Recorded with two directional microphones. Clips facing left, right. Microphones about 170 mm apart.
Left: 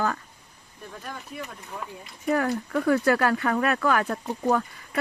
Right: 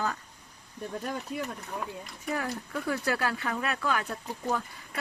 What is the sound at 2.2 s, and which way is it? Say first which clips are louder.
Speech: left 9 dB; 60° left (ahead or behind).